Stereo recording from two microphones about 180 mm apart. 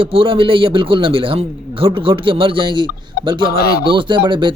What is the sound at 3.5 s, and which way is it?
Speech, 60° left (ahead or behind).